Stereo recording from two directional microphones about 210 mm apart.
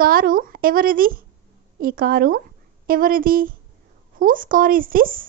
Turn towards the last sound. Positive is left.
turn(degrees=-40)  # may be behind; listen again after turning